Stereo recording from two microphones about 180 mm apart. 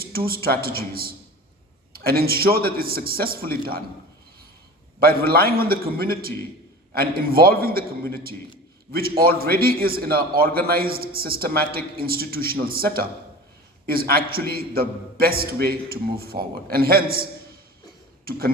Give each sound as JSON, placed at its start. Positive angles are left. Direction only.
{"t": 0.4, "sound": "a man's voice", "side_deg": -55}
{"t": 4.9, "sound": "a man's voice", "side_deg": -55}
{"t": 18.3, "sound": "a man's voice", "side_deg": -55}